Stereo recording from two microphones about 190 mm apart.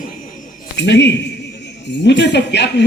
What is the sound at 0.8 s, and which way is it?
Speech, 65° left (ahead or behind).